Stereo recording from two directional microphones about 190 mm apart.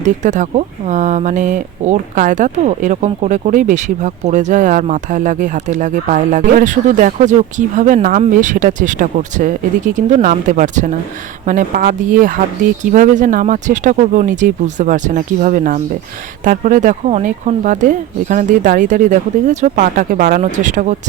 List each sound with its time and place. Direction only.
0.0 s speech: 40° right (ahead or behind)